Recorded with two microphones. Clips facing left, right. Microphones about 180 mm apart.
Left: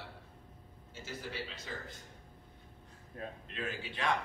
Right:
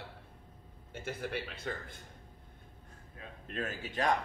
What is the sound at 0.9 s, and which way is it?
A man's voice, 55° right (ahead or behind).